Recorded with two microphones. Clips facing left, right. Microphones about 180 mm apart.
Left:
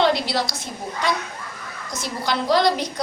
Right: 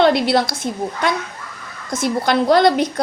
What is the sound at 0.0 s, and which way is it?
Speech, 55° right (ahead or behind).